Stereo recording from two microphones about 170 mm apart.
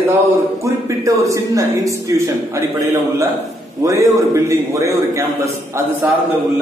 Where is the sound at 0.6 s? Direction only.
20° right (ahead or behind).